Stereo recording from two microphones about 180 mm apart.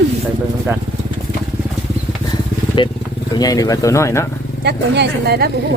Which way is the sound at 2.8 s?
30° left (ahead or behind).